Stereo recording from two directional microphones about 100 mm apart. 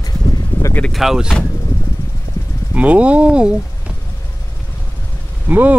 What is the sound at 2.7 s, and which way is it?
Speech, 15° right (ahead or behind).